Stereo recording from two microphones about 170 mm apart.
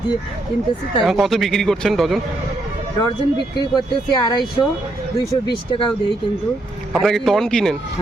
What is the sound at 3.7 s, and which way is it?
Speech, 25° left (ahead or behind).